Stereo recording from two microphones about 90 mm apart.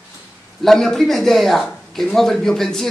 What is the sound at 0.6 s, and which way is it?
Speech, 5° left (ahead or behind).